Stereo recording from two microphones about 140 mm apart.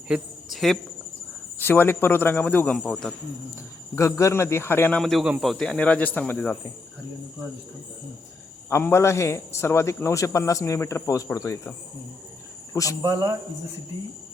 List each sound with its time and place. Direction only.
0.5 s speech: centre (ahead or behind)
1.5 s speech: 15° left (ahead or behind)
3.5 s a man's voice: 20° left (ahead or behind)
8.7 s a man's voice: 20° left (ahead or behind)
12.7 s a man's voice: 25° left (ahead or behind)
13.0 s speech: 25° right (ahead or behind)